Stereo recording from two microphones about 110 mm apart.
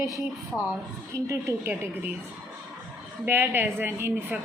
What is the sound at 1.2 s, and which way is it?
Speech, 25° right (ahead or behind).